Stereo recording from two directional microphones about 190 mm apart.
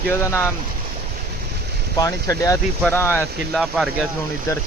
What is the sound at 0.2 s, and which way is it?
Speech, 15° left (ahead or behind).